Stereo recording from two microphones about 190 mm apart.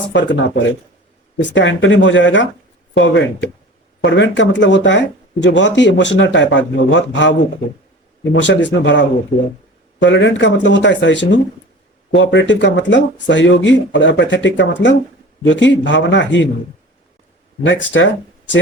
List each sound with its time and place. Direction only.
0.1 s speech: 70° left (ahead or behind)
17.7 s speech: 75° left (ahead or behind)